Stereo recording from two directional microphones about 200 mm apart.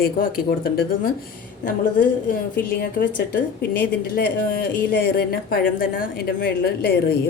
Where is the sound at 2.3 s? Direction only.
45° left (ahead or behind).